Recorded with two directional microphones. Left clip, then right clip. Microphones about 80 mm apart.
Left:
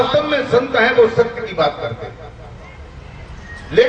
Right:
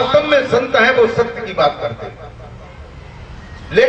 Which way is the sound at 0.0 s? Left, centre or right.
Right.